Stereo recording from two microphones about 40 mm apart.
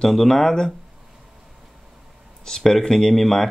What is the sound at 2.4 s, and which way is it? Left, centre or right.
Speech, centre.